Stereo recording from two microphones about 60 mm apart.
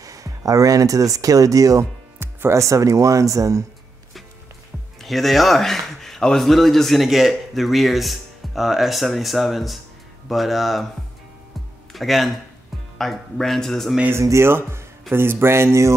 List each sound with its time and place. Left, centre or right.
0.0 s speech: right
2.2 s music: right
2.5 s speech: right
5.0 s a man's voice: centre
11.9 s a man's voice: centre
14.7 s speech: right